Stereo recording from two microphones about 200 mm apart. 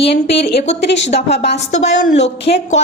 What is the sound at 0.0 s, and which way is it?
Speech, 30° left (ahead or behind).